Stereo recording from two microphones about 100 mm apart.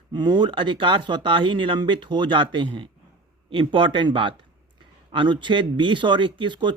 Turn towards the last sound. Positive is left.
turn(degrees=-50)  # may be behind; listen again after turning